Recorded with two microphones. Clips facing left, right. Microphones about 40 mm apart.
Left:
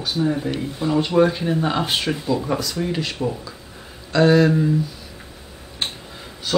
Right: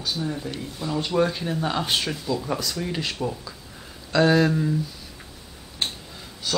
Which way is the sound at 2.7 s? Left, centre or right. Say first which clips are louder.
Left 4 dB; centre.